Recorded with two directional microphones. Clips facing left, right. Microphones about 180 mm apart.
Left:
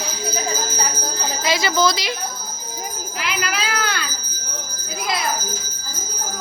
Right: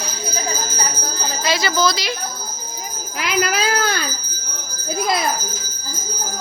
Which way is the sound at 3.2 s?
45° right (ahead or behind).